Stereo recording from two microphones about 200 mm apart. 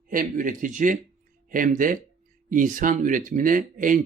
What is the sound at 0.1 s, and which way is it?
Speech, 45° right (ahead or behind).